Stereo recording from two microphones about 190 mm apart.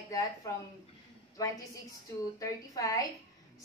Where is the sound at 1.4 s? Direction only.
20° left (ahead or behind).